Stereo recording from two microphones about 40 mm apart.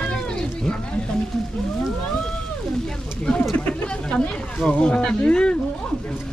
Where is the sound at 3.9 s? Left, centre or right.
Left.